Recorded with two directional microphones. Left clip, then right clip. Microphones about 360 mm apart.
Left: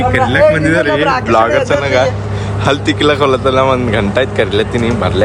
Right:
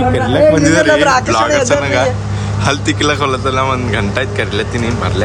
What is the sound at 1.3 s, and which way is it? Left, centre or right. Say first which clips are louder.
Speech: left 1 dB; centre.